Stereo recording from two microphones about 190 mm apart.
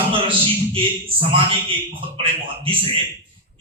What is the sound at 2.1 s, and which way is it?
Speech, 30° right (ahead or behind).